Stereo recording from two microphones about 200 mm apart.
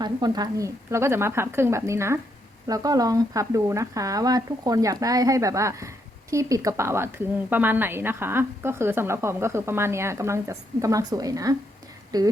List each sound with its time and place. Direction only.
0.0 s a woman's voice: 20° right (ahead or behind)